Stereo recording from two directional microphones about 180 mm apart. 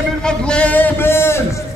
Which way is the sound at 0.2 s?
5° left (ahead or behind).